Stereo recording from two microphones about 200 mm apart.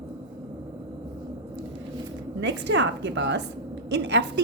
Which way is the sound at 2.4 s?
65° right (ahead or behind).